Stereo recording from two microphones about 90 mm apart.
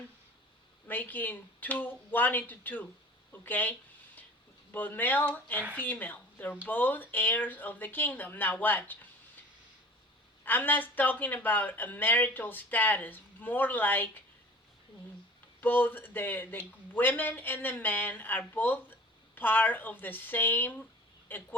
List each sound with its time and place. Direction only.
0.9 s speech: 20° left (ahead or behind)
10.4 s speech: 20° left (ahead or behind)
15.6 s speech: 20° left (ahead or behind)